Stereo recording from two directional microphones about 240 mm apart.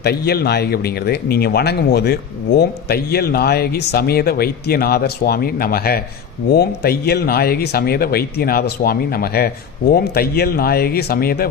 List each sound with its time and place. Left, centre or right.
0.0 s speech: left